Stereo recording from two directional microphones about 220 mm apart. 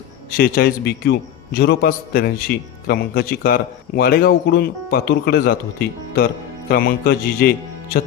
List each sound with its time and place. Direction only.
0.3 s a man's voice: 45° left (ahead or behind)
6.7 s a man's voice: 40° left (ahead or behind)